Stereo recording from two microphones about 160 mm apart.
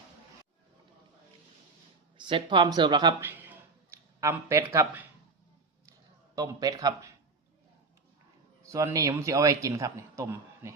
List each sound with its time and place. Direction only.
2.1 s speech: 30° right (ahead or behind)
6.3 s speech: 25° right (ahead or behind)
8.6 s speech: 20° right (ahead or behind)